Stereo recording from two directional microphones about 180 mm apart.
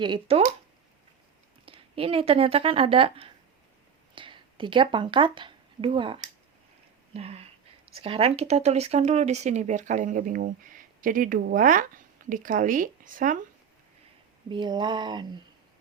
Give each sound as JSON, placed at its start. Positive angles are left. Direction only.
{"t": 0.0, "sound": "speech", "side_deg": -30}
{"t": 1.6, "sound": "a woman's voice", "side_deg": -30}
{"t": 14.5, "sound": "speech", "side_deg": -25}